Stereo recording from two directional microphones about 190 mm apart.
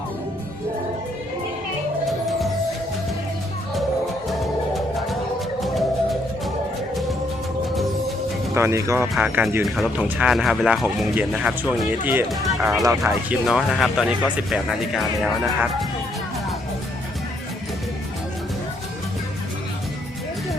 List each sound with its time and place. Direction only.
5.6 s music: centre (ahead or behind)
8.5 s speech: 15° right (ahead or behind)
13.1 s speech: centre (ahead or behind)